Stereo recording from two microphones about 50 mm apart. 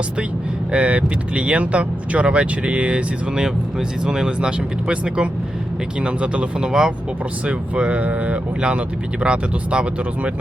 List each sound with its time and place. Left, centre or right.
0.7 s speech: right
6.7 s speech: centre
7.4 s speech: right